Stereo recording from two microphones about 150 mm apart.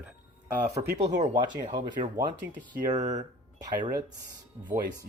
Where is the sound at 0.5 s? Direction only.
20° right (ahead or behind).